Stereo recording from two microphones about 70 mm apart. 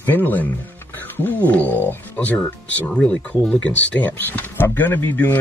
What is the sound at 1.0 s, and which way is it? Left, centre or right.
Music, left.